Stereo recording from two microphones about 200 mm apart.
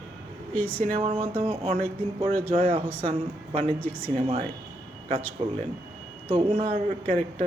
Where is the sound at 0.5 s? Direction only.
10° left (ahead or behind).